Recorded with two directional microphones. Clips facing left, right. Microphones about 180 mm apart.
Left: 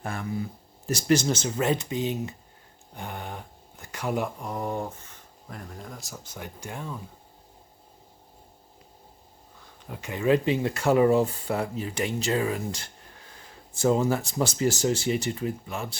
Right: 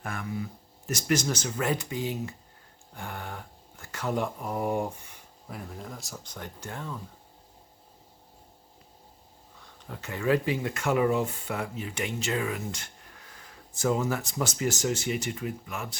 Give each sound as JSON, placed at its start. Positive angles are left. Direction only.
{"t": 0.0, "sound": "speech", "side_deg": 30}
{"t": 4.4, "sound": "speech", "side_deg": -5}
{"t": 9.9, "sound": "speech", "side_deg": 15}